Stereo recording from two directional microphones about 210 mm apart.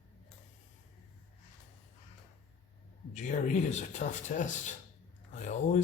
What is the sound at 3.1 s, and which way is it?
Speech, 35° left (ahead or behind).